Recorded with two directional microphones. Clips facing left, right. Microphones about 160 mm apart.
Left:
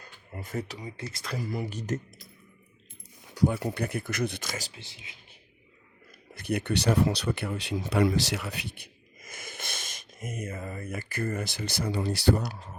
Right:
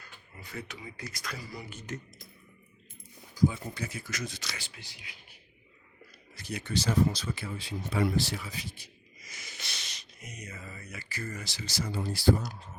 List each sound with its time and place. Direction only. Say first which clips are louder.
0.3 s speech: left 7 dB; 45° left (ahead or behind); by 1.4 s 30° left (ahead or behind)
1.4 s speech: left 9 dB; 50° left (ahead or behind)
1.6 s speech: left 8 dB; 35° left (ahead or behind)
3.3 s speech: left 2 dB; 70° left (ahead or behind); by 4.7 s 45° left (ahead or behind)
4.7 s speech: left 2 dB; 25° left (ahead or behind)
6.3 s speech: left 5 dB; 55° left (ahead or behind)